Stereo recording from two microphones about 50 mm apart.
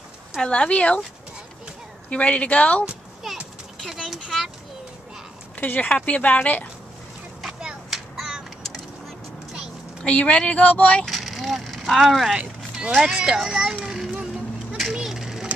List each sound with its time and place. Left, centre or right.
0.4 s speech: left
2.0 s speech: left
3.9 s a sound: centre
5.6 s speech: left
7.9 s a sound: centre
10.0 s speech: left
11.1 s vehicle: centre
12.4 s speech: right
13.8 s children playing: centre
14.8 s a sound: centre